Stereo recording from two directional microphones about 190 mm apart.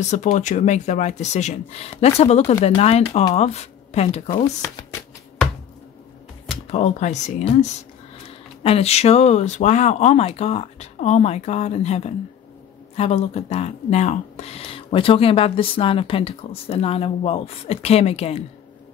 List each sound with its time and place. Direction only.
0.0 s speech: 40° left (ahead or behind)
6.5 s speech: 35° left (ahead or behind)